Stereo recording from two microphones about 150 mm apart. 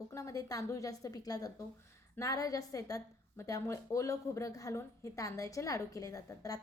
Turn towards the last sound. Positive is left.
turn(degrees=25)  # may be behind; listen again after turning